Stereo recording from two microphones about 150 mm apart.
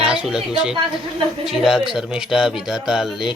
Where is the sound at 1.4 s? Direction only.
5° right (ahead or behind).